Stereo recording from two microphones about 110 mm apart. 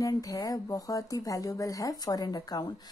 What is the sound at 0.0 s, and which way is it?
Speech, 30° left (ahead or behind).